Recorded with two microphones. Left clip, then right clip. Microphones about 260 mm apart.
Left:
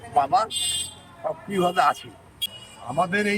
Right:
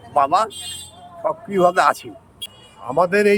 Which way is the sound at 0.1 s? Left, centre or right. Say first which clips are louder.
Right 4 dB; right.